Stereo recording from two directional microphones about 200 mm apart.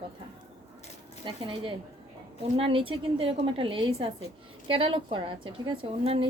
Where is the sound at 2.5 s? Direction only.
25° right (ahead or behind).